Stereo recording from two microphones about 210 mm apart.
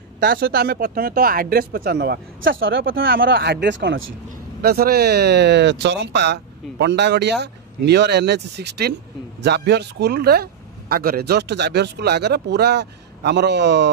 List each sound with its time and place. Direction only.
0.2 s speech: 45° right (ahead or behind); by 3.1 s 65° right (ahead or behind)
3.1 s speech: 50° right (ahead or behind)
4.6 s speech: 45° right (ahead or behind)